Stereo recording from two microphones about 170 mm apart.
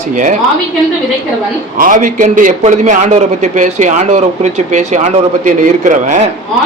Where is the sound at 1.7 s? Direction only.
50° right (ahead or behind).